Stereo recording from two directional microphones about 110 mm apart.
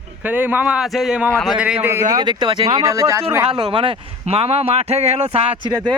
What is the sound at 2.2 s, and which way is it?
Speech, 45° right (ahead or behind).